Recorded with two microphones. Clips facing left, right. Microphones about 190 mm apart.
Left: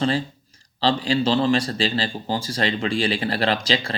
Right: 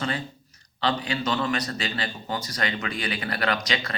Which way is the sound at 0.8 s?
30° left (ahead or behind).